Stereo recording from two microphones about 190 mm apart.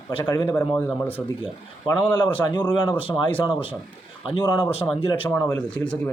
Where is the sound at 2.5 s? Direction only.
25° left (ahead or behind).